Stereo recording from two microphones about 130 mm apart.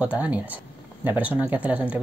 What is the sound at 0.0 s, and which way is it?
Speech, 10° right (ahead or behind).